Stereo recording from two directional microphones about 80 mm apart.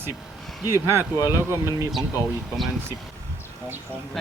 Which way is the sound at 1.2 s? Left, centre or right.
Right.